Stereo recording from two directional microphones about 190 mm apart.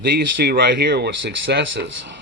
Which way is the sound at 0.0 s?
60° right (ahead or behind).